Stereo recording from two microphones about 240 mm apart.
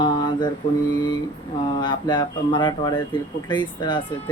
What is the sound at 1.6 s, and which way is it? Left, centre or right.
Speech, centre.